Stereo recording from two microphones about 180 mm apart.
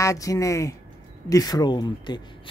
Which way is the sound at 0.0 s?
15° left (ahead or behind).